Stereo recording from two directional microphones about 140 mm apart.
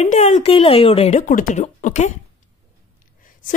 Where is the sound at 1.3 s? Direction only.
65° left (ahead or behind).